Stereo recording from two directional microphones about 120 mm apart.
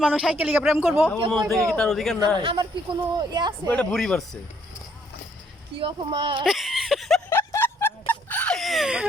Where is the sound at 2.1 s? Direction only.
40° right (ahead or behind).